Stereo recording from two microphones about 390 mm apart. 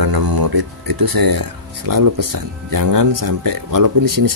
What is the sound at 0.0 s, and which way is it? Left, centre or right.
Speech, right.